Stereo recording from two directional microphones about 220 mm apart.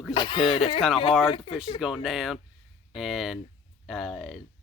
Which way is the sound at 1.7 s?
Centre (ahead or behind).